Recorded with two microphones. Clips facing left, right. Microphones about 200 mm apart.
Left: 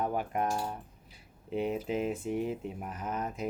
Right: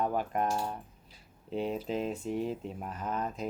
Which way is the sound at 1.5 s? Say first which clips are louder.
Left 1 dB; 10° left (ahead or behind).